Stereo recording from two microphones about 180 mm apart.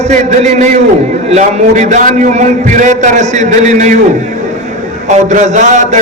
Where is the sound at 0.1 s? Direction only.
45° right (ahead or behind).